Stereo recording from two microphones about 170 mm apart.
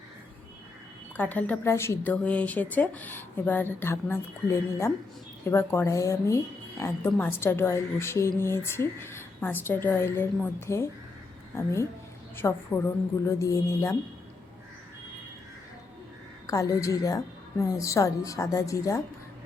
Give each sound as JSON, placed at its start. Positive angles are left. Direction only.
{"t": 1.1, "sound": "speech", "side_deg": 10}
{"t": 16.5, "sound": "a woman's voice", "side_deg": 20}